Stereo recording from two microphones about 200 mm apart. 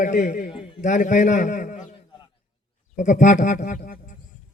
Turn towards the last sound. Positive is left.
turn(degrees=40)  # may be behind; listen again after turning